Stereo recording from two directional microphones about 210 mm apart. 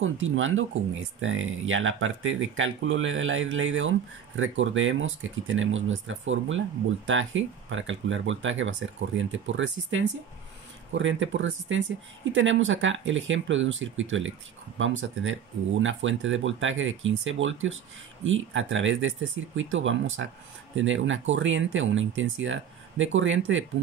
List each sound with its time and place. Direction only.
0.0 s speech: 70° right (ahead or behind)